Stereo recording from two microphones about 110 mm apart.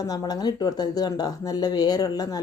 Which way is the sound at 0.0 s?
35° left (ahead or behind).